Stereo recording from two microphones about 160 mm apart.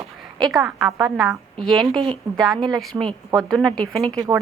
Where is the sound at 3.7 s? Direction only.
5° left (ahead or behind).